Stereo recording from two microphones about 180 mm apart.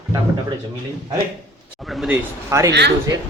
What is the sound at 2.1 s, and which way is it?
Speech, 15° right (ahead or behind).